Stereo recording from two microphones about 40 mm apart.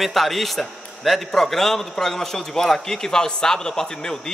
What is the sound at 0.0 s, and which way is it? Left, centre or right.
A man's voice, centre.